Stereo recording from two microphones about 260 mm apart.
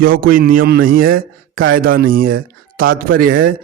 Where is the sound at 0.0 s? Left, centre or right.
Right.